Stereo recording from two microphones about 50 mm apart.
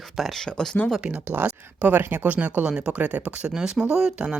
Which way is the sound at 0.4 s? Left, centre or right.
Centre.